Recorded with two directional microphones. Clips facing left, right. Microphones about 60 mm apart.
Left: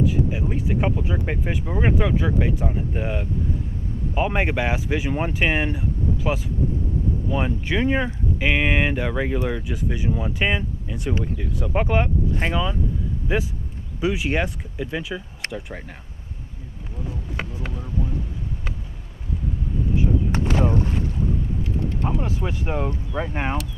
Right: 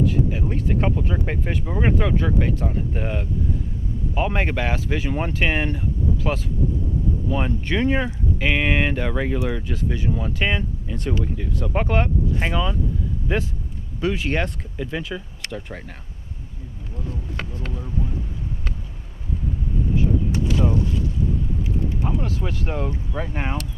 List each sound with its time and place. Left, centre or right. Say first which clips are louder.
0.0 s speech: even; centre
7.3 s speech: even; centre
17.0 s a sound: left 1 dB; centre
20.3 s speech: even; left
21.6 s vehicle: even; centre
22.2 s speech: even; left